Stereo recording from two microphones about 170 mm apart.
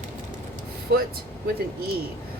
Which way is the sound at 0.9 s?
70° right (ahead or behind).